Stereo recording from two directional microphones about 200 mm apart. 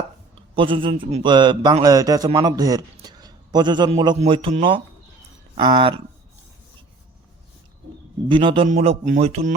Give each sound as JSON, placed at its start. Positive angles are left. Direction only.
{"t": 0.5, "sound": "a man's voice", "side_deg": -25}
{"t": 8.3, "sound": "a man's voice", "side_deg": -25}